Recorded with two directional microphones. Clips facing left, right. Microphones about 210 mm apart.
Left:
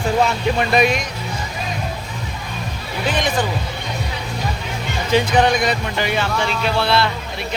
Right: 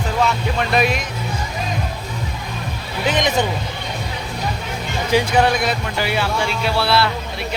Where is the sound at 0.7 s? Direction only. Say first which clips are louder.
Left 1 dB; centre (ahead or behind).